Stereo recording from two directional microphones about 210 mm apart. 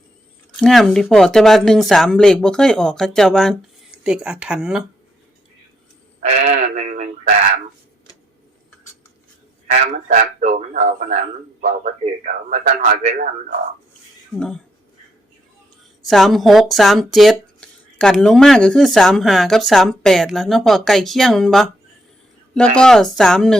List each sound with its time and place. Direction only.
0.6 s speech: centre (ahead or behind)
6.1 s speech: 30° right (ahead or behind)
9.8 s speech: 35° right (ahead or behind)
14.3 s speech: 5° left (ahead or behind)
16.0 s speech: centre (ahead or behind)